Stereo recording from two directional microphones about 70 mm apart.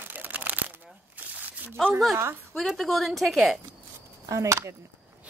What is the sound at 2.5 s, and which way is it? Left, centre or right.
A woman's voice, centre.